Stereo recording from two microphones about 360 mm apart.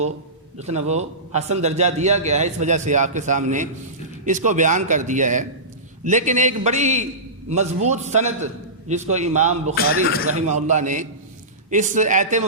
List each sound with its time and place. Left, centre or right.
0.6 s a man's voice: centre